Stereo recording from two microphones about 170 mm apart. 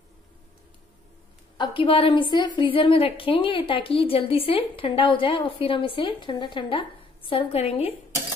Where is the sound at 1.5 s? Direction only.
30° left (ahead or behind).